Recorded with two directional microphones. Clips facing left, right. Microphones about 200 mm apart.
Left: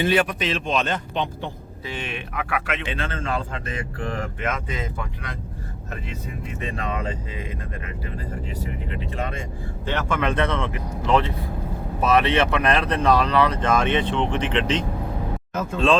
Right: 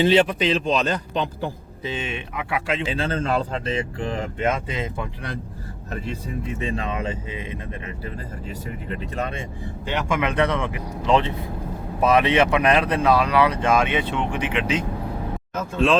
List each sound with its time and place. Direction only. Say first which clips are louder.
0.0 s speech: right 4 dB; 25° right (ahead or behind)
1.8 s speech: right 3 dB; 20° right (ahead or behind); by 3.6 s 40° right (ahead or behind)
3.7 s speech: right 4 dB; 25° right (ahead or behind)
6.6 s speech: even; 25° right (ahead or behind)
9.8 s speech: even; 15° right (ahead or behind)